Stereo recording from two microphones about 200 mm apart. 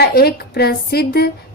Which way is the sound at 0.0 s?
50° left (ahead or behind).